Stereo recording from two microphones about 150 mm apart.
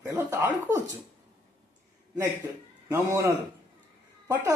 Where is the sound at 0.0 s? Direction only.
15° right (ahead or behind).